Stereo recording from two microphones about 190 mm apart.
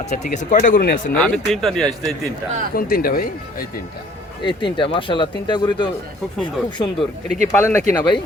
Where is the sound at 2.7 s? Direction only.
50° left (ahead or behind).